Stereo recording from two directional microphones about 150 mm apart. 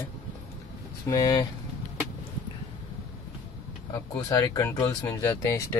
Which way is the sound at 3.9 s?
25° left (ahead or behind).